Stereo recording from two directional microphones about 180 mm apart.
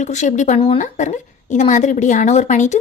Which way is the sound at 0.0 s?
40° left (ahead or behind).